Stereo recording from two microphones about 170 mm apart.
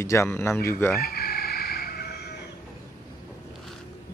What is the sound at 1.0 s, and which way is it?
Music, 65° left (ahead or behind).